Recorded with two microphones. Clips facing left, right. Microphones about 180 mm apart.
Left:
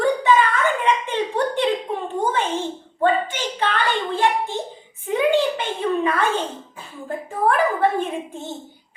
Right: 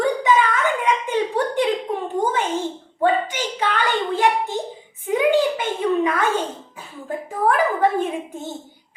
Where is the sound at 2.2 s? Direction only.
10° left (ahead or behind).